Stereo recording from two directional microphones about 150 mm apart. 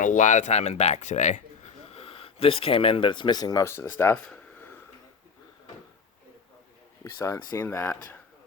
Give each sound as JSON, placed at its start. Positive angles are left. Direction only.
{"t": 0.0, "sound": "a man's voice", "side_deg": 55}
{"t": 4.3, "sound": "a sound", "side_deg": 15}
{"t": 7.0, "sound": "speech", "side_deg": 20}